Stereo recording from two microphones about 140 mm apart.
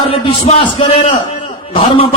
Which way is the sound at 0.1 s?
40° left (ahead or behind).